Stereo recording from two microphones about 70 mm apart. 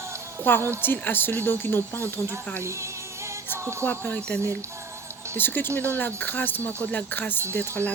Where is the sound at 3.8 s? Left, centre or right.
Left.